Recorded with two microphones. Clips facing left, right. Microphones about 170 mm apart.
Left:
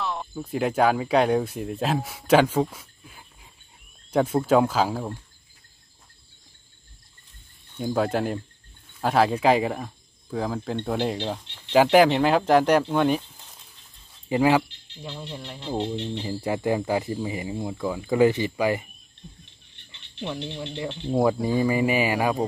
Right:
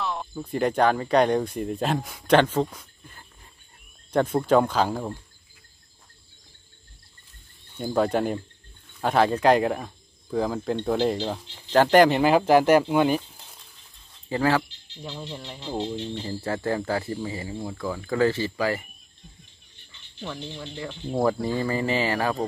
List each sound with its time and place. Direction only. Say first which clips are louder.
0.0 s speech: even; centre (ahead or behind)
7.7 s speech: right 1 dB; centre (ahead or behind)
14.3 s speech: left 3 dB; 15° left (ahead or behind)
15.0 s speech: even; centre (ahead or behind)
15.7 s speech: left 2 dB; 15° left (ahead or behind)
19.9 s a sound: left 3 dB; 15° left (ahead or behind)
20.4 s speech: left 3 dB; 20° left (ahead or behind)